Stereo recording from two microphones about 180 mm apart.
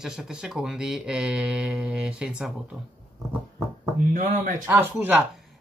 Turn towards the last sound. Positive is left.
turn(degrees=-10)  # may be behind; listen again after turning